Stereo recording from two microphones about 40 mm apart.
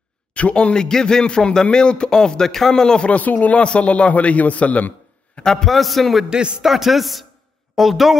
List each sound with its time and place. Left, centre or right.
0.3 s a man's voice: left
0.7 s a man's voice: centre
2.7 s a man's voice: centre
3.1 s speech: left
3.5 s a man's voice: left
5.4 s a man's voice: centre